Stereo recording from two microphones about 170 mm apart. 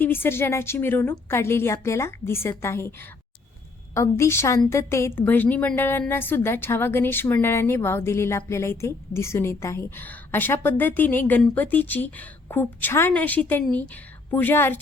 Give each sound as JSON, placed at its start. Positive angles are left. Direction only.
{"t": 0.0, "sound": "a woman's voice", "side_deg": 15}